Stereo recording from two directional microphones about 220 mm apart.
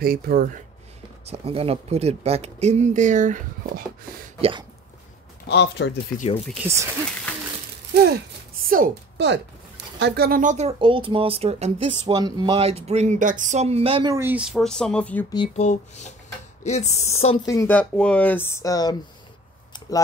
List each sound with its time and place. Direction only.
0.0 s speech: 45° right (ahead or behind)
1.2 s speech: 25° right (ahead or behind)
4.4 s speech: 25° right (ahead or behind)
5.5 s speech: 50° left (ahead or behind)
6.1 s speech: 30° left (ahead or behind)
6.4 s speech: centre (ahead or behind)
7.9 s speech: 45° right (ahead or behind); by 14.1 s 25° right (ahead or behind)
14.1 s speech: 10° right (ahead or behind)
15.3 s speech: 25° left (ahead or behind)
17.5 s speech: 10° left (ahead or behind)